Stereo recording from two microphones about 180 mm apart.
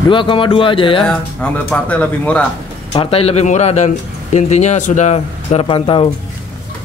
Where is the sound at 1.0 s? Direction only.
5° left (ahead or behind).